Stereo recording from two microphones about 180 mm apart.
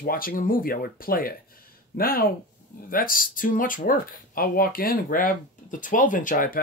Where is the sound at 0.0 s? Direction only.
55° left (ahead or behind).